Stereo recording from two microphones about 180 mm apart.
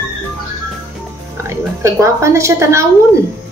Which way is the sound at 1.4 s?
15° right (ahead or behind).